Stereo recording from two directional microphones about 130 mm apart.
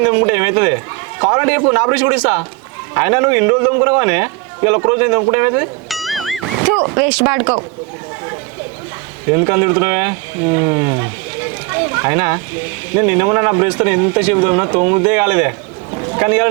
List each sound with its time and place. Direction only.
0.0 s a man's voice: 20° right (ahead or behind)
5.9 s music: centre (ahead or behind)
6.8 s a man's voice: 20° right (ahead or behind)
9.3 s a man's voice: 20° right (ahead or behind)
11.7 s children playing: 20° right (ahead or behind)
12.9 s a man's voice: 20° right (ahead or behind)
16.0 s a sound: 20° right (ahead or behind)